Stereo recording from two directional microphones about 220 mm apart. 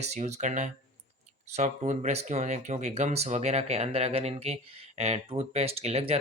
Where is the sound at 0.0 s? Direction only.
30° right (ahead or behind).